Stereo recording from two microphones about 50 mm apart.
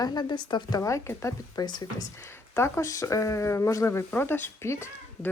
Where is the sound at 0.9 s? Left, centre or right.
Left.